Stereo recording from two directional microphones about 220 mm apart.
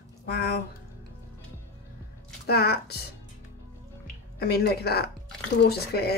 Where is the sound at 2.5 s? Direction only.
45° left (ahead or behind).